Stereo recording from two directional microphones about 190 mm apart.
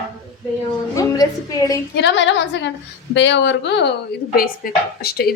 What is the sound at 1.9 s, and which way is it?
A woman's voice, 65° left (ahead or behind).